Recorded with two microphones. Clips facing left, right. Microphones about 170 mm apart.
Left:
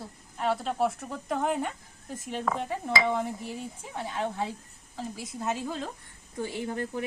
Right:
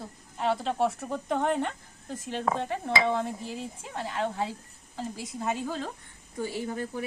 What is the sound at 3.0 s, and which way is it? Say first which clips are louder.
Speech: right 1 dB; 15° left (ahead or behind).